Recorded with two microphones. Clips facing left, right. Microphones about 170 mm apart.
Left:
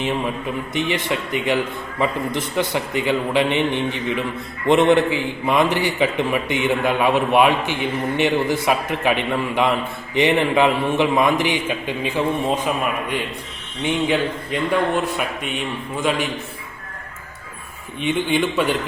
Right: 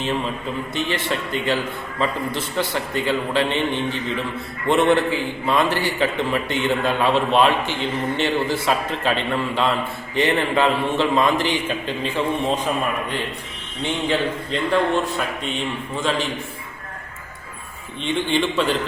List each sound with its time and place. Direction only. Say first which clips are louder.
0.7 s a man's voice: left 2 dB; 15° left (ahead or behind)
13.8 s a man's voice: left 2 dB; 15° left (ahead or behind)
18.0 s a man's voice: left 1 dB; 15° left (ahead or behind)